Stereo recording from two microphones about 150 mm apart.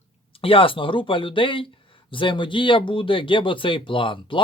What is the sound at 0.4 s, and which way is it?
Speech, 35° left (ahead or behind).